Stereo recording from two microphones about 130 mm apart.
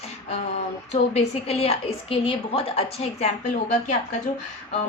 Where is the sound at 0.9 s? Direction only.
55° left (ahead or behind).